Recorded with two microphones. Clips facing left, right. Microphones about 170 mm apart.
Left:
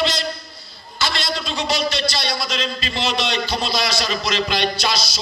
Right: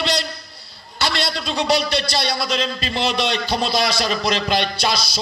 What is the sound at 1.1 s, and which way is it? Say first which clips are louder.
A man's voice: right 2 dB; 60° right (ahead or behind).